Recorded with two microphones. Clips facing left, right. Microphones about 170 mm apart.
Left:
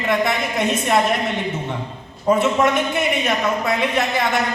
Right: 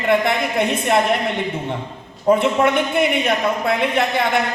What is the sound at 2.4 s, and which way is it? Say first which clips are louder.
A man's voice: right 1 dB; 55° right (ahead or behind).